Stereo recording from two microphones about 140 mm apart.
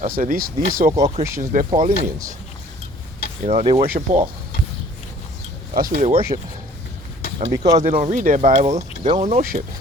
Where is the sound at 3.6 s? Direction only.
45° right (ahead or behind).